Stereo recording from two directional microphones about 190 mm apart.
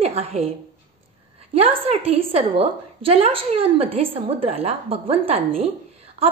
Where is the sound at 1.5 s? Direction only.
30° right (ahead or behind).